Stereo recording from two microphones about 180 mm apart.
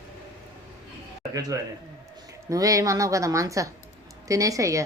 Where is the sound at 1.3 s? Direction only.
20° right (ahead or behind).